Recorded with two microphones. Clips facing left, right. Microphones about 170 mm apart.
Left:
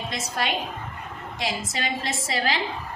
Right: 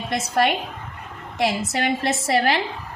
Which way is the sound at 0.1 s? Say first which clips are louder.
Right 9 dB; 60° right (ahead or behind).